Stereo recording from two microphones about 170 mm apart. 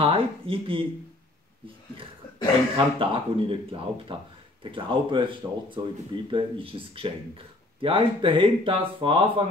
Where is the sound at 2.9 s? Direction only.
30° right (ahead or behind).